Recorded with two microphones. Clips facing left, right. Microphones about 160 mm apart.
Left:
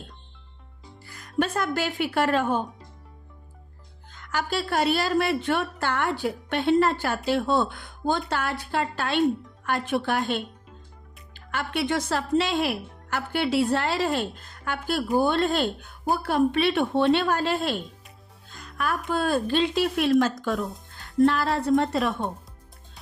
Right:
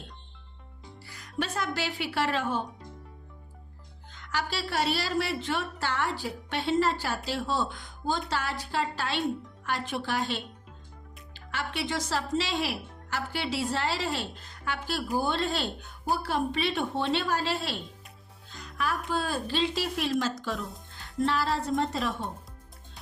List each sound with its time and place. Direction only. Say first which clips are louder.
1.0 s a woman's voice: left 7 dB; 50° left (ahead or behind)
4.1 s a woman's voice: left 5 dB; 50° left (ahead or behind); by 22.3 s 65° left (ahead or behind)